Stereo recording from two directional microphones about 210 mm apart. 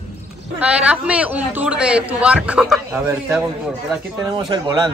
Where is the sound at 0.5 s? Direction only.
5° right (ahead or behind).